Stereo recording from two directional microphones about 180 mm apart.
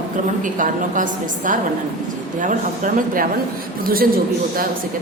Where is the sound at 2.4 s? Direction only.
45° right (ahead or behind).